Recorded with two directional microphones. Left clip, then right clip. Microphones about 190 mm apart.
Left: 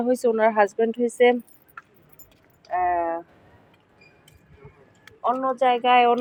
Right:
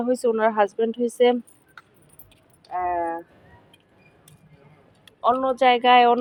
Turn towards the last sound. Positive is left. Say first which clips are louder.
# right 2 dB
turn(degrees=-15)  # may be behind; listen again after turning